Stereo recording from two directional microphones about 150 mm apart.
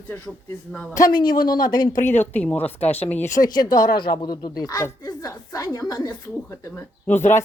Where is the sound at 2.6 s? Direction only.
40° left (ahead or behind).